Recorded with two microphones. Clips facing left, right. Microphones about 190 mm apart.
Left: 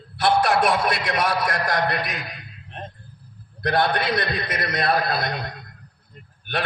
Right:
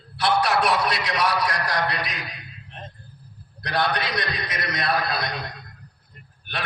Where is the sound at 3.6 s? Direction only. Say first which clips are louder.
Left 4 dB; 55° left (ahead or behind).